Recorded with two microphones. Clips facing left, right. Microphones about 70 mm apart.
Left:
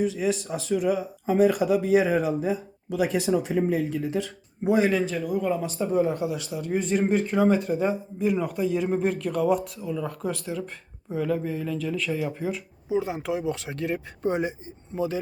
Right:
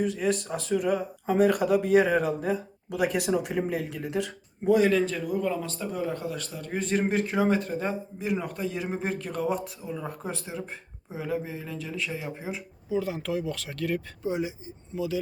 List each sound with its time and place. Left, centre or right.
0.0 s speech: centre
4.6 s speech: left
4.9 s speech: centre
5.5 s speech: centre
5.9 s speech: left
6.1 s speech: centre
6.7 s speech: centre
9.8 s speech: right
11.1 s speech: centre
12.4 s speech: right
12.9 s speech: left
14.2 s speech: left
14.9 s speech: left